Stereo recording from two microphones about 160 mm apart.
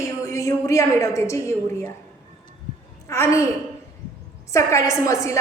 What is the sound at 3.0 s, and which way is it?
Speech, 20° left (ahead or behind).